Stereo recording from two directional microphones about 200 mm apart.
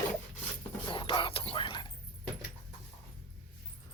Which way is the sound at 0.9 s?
25° left (ahead or behind).